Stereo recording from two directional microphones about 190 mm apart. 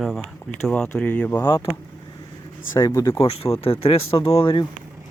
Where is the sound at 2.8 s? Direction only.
15° left (ahead or behind).